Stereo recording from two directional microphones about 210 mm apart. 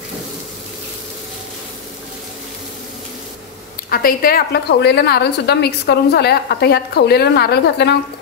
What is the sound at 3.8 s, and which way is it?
A woman's voice, 45° left (ahead or behind).